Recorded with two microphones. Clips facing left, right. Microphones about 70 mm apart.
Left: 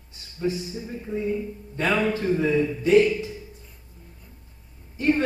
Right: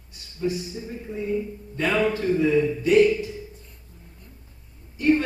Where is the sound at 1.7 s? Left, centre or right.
Left.